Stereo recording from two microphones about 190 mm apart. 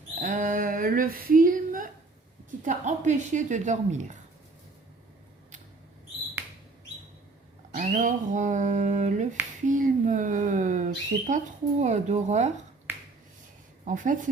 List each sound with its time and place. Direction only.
0.2 s speech: 45° right (ahead or behind)
7.7 s speech: 40° right (ahead or behind)
13.8 s speech: 45° right (ahead or behind)